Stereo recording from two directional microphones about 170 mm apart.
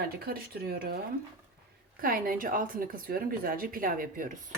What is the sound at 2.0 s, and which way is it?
A woman's voice, 55° right (ahead or behind).